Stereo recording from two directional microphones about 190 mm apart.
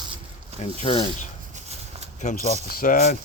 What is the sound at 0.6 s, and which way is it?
Speech, 35° left (ahead or behind).